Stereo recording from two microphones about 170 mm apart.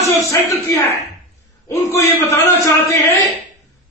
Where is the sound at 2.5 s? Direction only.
20° left (ahead or behind).